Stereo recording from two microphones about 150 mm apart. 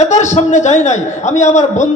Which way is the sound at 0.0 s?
50° left (ahead or behind).